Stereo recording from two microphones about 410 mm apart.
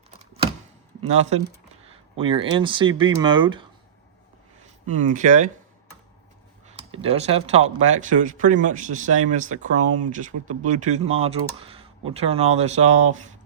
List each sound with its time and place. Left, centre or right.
1.0 s speech: centre
4.9 s speech: centre
6.7 s speech: centre